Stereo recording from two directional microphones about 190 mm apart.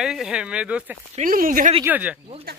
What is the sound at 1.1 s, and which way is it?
Speech, 45° right (ahead or behind).